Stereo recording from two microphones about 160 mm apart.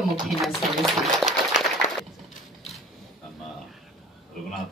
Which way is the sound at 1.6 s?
50° left (ahead or behind).